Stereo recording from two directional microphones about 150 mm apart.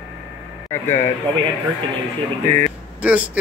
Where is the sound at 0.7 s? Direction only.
15° left (ahead or behind).